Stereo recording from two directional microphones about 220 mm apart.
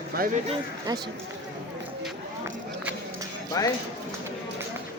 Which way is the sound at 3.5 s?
15° left (ahead or behind).